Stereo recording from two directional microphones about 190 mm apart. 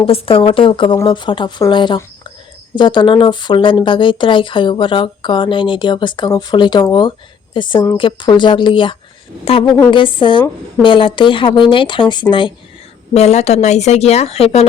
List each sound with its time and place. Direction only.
0.0 s speech: 30° left (ahead or behind)